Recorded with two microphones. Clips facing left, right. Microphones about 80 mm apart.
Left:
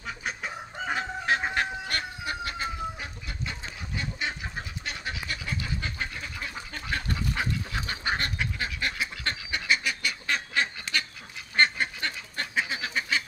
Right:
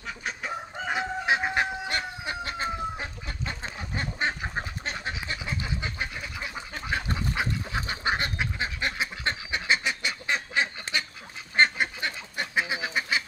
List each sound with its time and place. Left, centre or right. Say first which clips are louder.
0.0 s chicken: even; centre
0.9 s chicken: right 2 dB; centre
11.5 s duck: right 2 dB; centre